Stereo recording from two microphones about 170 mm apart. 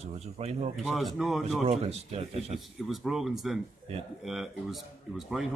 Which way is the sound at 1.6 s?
35° right (ahead or behind).